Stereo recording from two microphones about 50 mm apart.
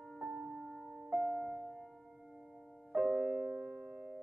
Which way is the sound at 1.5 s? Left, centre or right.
Right.